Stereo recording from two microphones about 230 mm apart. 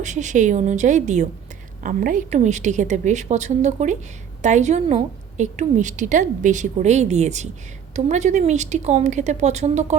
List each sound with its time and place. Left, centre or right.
0.0 s a woman's voice: right